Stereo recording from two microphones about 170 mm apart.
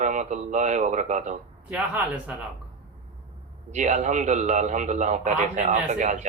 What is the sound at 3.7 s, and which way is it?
A man's voice, 45° right (ahead or behind).